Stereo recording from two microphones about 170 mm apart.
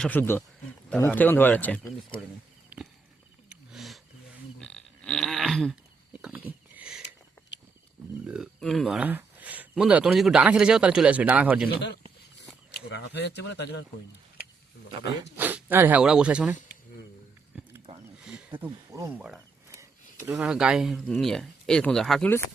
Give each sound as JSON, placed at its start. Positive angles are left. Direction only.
{"t": 0.0, "sound": "speech", "side_deg": 10}
{"t": 2.7, "sound": "walk", "side_deg": -10}
{"t": 3.5, "sound": "wild animals", "side_deg": 0}
{"t": 4.6, "sound": "frog", "side_deg": 5}
{"t": 6.2, "sound": "a sound", "side_deg": -10}
{"t": 8.2, "sound": "speech", "side_deg": -5}
{"t": 12.9, "sound": "speech", "side_deg": 75}
{"t": 15.4, "sound": "speech", "side_deg": -10}
{"t": 17.5, "sound": "wild animals", "side_deg": -5}
{"t": 18.5, "sound": "speech", "side_deg": -25}
{"t": 19.7, "sound": "a sound", "side_deg": -15}
{"t": 20.3, "sound": "speech", "side_deg": -5}